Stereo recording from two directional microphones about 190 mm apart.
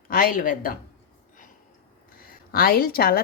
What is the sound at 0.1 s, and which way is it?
Speech, 50° left (ahead or behind).